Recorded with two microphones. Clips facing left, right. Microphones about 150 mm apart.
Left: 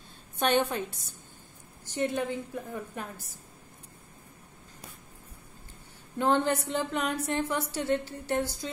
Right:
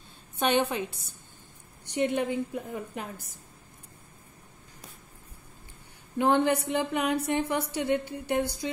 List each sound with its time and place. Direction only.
0.5 s a woman's voice: 10° right (ahead or behind)
2.0 s a woman's voice: 20° right (ahead or behind)
6.1 s a woman's voice: 15° right (ahead or behind)